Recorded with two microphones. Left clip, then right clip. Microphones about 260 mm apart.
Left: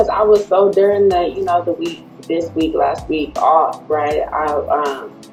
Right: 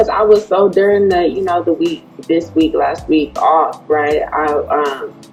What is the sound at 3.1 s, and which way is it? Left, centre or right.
Speech, right.